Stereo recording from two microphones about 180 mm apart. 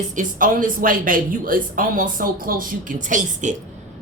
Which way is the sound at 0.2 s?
50° right (ahead or behind).